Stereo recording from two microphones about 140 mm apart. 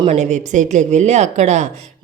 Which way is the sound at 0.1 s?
60° right (ahead or behind).